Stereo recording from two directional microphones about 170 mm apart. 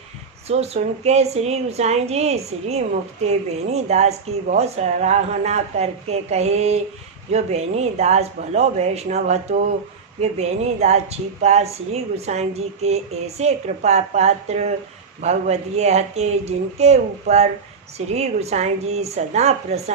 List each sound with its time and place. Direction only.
0.4 s speech: 40° right (ahead or behind)